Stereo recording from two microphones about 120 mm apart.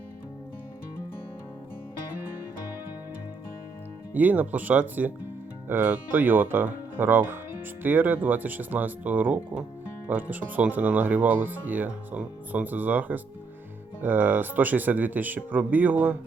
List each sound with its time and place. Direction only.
4.1 s speech: 15° right (ahead or behind)